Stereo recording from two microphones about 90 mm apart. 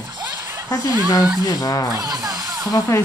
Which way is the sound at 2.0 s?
40° right (ahead or behind).